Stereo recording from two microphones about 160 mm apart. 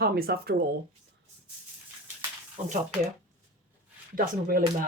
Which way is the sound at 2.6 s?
50° right (ahead or behind).